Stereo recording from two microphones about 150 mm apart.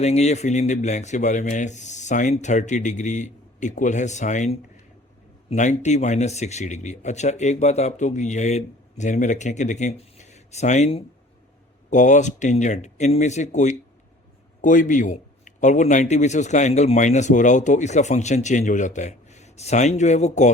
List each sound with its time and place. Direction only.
0.0 s a man's voice: 45° left (ahead or behind)